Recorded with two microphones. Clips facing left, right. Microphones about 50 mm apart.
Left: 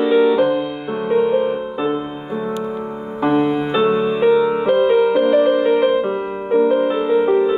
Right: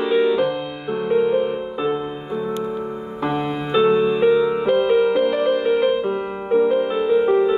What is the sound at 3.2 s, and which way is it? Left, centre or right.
Music, centre.